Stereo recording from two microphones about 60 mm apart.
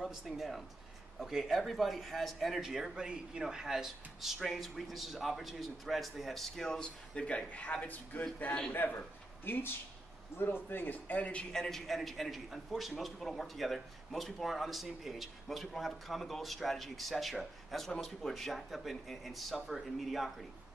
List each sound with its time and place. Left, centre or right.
0.0 s speech: centre; by 11.4 s left
11.5 s speech: centre